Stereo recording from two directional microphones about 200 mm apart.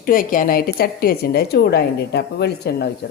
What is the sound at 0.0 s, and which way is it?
A woman's voice, 45° left (ahead or behind).